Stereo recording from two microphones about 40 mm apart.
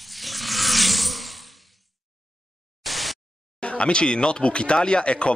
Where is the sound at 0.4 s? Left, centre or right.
Centre.